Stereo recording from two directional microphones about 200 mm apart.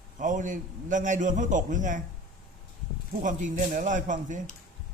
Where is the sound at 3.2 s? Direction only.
40° right (ahead or behind).